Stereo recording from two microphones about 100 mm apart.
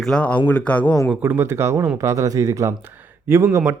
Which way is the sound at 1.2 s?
20° right (ahead or behind).